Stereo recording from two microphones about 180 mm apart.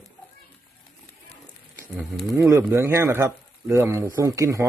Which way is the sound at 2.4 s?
15° right (ahead or behind).